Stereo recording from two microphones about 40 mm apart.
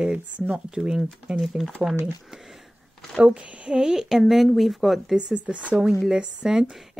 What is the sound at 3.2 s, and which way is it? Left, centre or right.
Speech, right.